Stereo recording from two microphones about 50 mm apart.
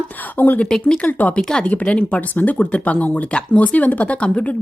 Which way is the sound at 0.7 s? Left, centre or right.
Centre.